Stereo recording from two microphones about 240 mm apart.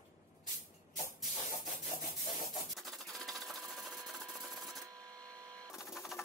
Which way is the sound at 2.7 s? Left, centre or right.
Centre.